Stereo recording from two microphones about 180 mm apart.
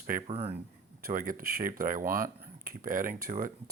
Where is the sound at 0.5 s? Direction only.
55° right (ahead or behind).